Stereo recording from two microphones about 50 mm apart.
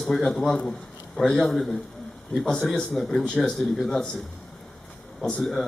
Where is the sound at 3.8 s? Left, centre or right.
Centre.